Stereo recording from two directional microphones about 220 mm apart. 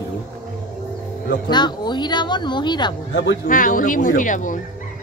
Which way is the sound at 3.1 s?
50° left (ahead or behind).